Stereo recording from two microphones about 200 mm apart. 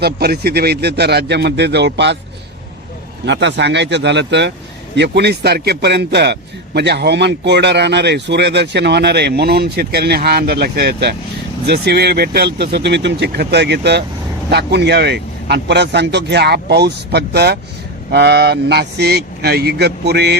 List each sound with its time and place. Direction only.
0.0 s a man's voice: 50° right (ahead or behind)
3.2 s a man's voice: 60° right (ahead or behind)